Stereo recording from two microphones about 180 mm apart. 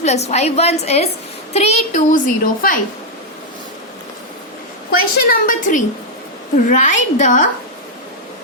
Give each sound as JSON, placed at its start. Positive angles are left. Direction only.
{"t": 0.0, "sound": "a woman's voice", "side_deg": 40}
{"t": 4.9, "sound": "a woman's voice", "side_deg": 55}